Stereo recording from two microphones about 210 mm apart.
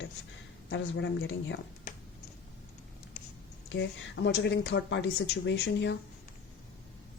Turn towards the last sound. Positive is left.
turn(degrees=55)  # may be behind; listen again after turning